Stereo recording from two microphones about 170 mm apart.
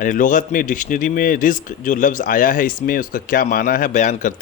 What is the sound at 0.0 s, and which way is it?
A man's voice, 50° left (ahead or behind).